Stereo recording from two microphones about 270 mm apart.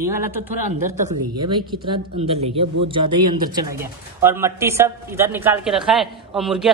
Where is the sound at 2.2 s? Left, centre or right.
Right.